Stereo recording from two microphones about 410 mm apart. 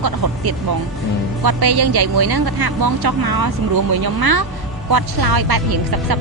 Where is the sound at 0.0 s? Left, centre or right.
Right.